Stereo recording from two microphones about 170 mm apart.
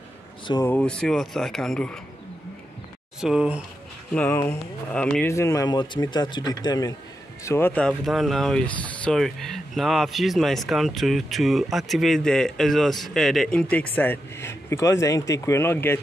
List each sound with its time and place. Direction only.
0.5 s speech: 20° left (ahead or behind)
0.7 s speech: 5° left (ahead or behind)
3.2 s speech: 5° right (ahead or behind)
4.1 s speech: 10° left (ahead or behind)
5.2 s speech: 15° left (ahead or behind)